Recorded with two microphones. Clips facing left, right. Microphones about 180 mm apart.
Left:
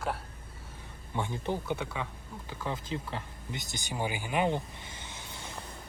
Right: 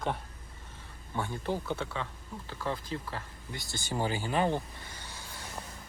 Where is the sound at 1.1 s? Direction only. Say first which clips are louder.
Even; 20° left (ahead or behind).